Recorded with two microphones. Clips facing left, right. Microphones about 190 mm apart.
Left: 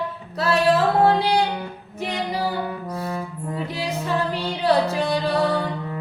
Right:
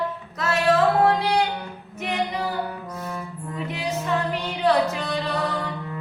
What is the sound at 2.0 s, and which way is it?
Female singing, 35° left (ahead or behind).